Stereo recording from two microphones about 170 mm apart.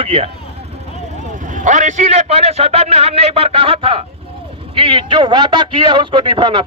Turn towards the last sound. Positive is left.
turn(degrees=-30)  # may be behind; listen again after turning